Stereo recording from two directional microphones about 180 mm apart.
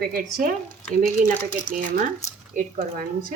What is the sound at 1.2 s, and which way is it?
Speech, 50° right (ahead or behind).